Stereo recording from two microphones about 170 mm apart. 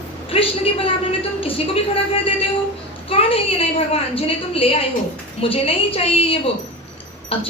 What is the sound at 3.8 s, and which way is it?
A woman's voice, 35° left (ahead or behind).